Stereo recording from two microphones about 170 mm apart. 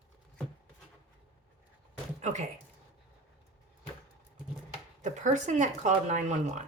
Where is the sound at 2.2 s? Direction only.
45° right (ahead or behind).